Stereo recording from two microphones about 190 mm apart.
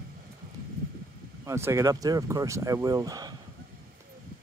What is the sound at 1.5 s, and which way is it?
Speech, 15° right (ahead or behind).